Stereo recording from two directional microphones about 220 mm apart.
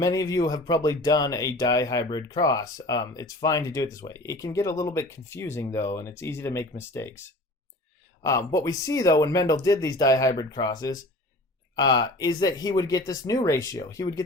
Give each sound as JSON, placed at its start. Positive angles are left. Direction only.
{"t": 0.0, "sound": "speech", "side_deg": 15}